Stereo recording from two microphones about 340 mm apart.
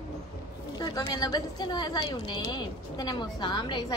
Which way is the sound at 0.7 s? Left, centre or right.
Centre.